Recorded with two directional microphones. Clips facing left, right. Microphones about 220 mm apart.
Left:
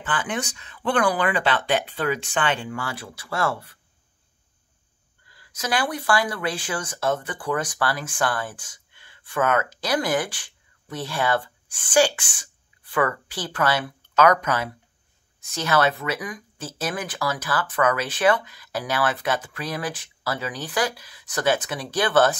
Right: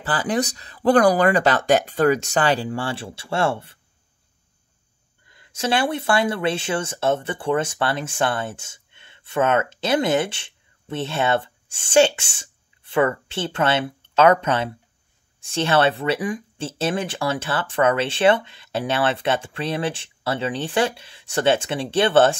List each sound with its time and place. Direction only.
0.0 s speech: 35° right (ahead or behind)
5.2 s speech: 25° right (ahead or behind)